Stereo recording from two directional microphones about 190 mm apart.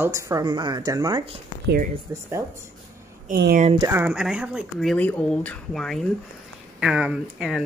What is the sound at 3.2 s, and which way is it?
Speech, 60° right (ahead or behind).